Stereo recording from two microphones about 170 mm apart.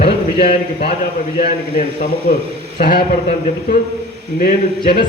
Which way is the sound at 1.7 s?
50° left (ahead or behind).